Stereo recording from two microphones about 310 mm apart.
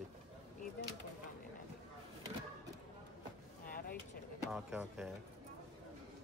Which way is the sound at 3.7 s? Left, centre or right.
Left.